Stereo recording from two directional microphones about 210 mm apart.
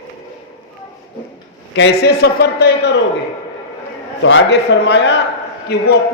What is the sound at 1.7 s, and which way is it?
A man's voice, 55° left (ahead or behind).